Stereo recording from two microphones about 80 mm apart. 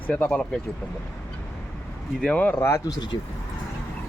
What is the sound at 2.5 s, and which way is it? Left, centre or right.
Speech, left.